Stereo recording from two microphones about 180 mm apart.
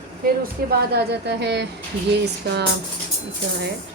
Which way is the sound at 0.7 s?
65° right (ahead or behind).